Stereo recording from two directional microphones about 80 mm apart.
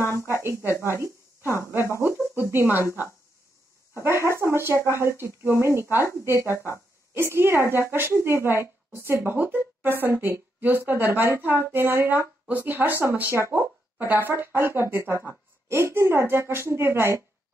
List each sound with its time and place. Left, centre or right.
0.3 s a woman's voice: right
3.9 s speech: right
6.5 s speech: left
7.2 s a woman's voice: right